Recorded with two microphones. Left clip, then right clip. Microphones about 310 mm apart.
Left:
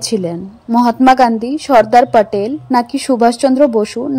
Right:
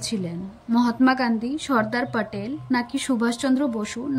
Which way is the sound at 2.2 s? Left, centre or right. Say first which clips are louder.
Left 15 dB; centre.